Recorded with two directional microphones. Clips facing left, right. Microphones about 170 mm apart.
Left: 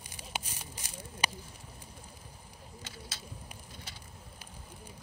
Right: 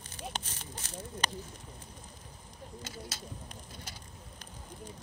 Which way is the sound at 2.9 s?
40° right (ahead or behind).